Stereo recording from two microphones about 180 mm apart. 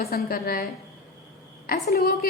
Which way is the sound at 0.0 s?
55° left (ahead or behind).